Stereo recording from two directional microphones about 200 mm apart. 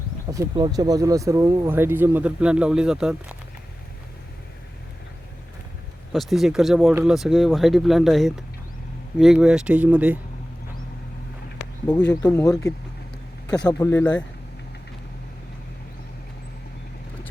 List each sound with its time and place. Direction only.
0.3 s speech: 20° right (ahead or behind)
6.1 s speech: centre (ahead or behind)
12.2 s speech: 15° left (ahead or behind)
13.7 s speech: 15° left (ahead or behind)